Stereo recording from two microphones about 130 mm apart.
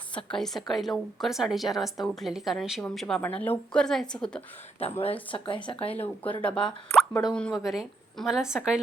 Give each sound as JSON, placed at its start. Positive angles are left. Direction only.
{"t": 0.3, "sound": "a woman's voice", "side_deg": 5}
{"t": 4.8, "sound": "a woman's voice", "side_deg": 50}
{"t": 5.3, "sound": "speech", "side_deg": 40}
{"t": 5.9, "sound": "a woman's voice", "side_deg": 10}